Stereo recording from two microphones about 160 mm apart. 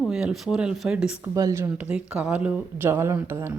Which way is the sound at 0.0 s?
5° right (ahead or behind).